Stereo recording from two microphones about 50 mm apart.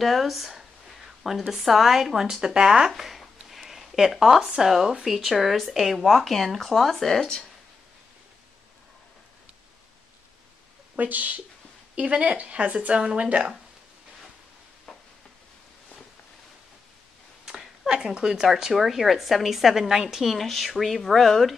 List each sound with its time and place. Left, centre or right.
0.0 s a sound: centre
1.5 s a woman's voice: centre
11.0 s speech: right
14.9 s stir: centre
17.8 s a woman's voice: centre